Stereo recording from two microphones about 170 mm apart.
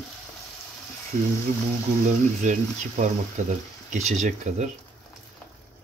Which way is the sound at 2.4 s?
45° right (ahead or behind).